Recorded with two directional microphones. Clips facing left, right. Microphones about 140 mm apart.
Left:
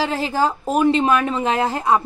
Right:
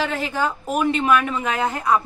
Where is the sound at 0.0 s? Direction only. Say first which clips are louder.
Left 3 dB; 35° left (ahead or behind).